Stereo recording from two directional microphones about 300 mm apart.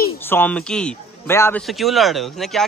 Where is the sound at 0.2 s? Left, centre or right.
Centre.